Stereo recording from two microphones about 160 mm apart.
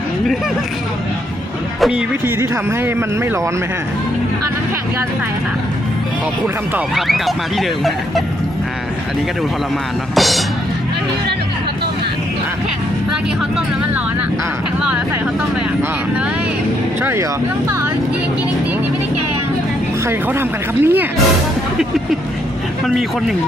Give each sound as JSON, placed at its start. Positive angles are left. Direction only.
{"t": 1.8, "sound": "speech", "side_deg": -5}
{"t": 2.4, "sound": "speech", "side_deg": -15}
{"t": 6.7, "sound": "speech", "side_deg": 0}
{"t": 10.2, "sound": "speech", "side_deg": 0}
{"t": 14.8, "sound": "speech", "side_deg": -5}
{"t": 20.1, "sound": "speech", "side_deg": -15}